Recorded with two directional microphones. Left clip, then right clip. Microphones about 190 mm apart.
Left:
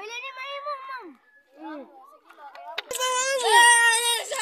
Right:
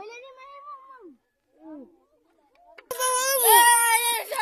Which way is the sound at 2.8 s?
35° right (ahead or behind).